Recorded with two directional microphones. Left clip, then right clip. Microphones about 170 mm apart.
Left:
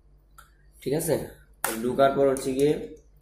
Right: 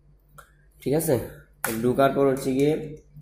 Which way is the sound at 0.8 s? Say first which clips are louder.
Right 3 dB; 50° right (ahead or behind).